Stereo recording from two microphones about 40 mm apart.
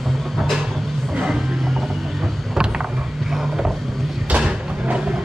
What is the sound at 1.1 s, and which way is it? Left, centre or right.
Music, centre.